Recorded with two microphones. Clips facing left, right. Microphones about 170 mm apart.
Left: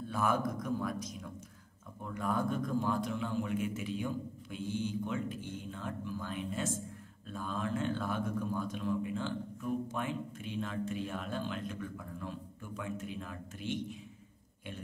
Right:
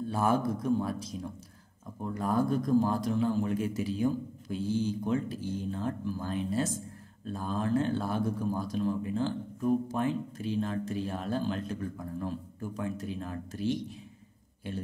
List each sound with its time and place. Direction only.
0.0 s a man's voice: 30° right (ahead or behind)